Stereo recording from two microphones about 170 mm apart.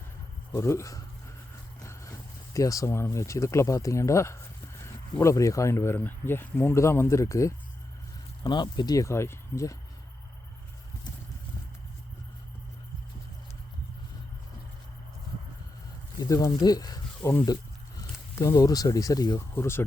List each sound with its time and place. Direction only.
0.5 s speech: 15° left (ahead or behind)
16.3 s speech: 20° left (ahead or behind)